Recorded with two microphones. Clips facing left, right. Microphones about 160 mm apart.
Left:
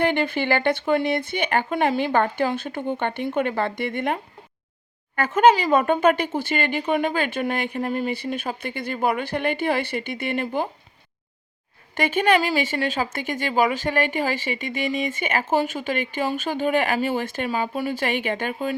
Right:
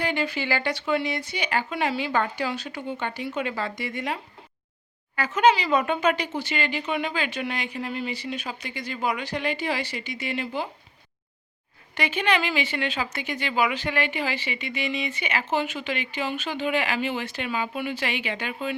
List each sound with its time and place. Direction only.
0.0 s speech: 55° left (ahead or behind)
11.9 s speech: 50° left (ahead or behind)